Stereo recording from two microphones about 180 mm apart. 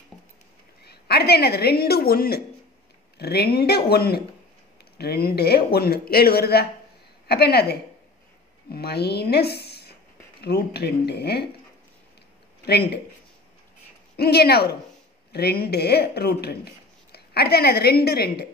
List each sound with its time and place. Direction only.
0.8 s speech: 60° left (ahead or behind)
8.7 s a woman's voice: 65° left (ahead or behind)
12.6 s speech: 65° left (ahead or behind)
14.1 s speech: 60° left (ahead or behind)